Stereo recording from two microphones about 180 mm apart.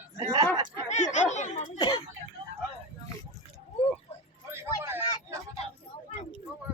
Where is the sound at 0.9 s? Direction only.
40° left (ahead or behind).